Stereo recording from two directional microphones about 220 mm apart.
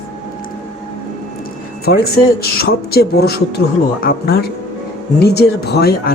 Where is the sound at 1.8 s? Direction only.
45° left (ahead or behind).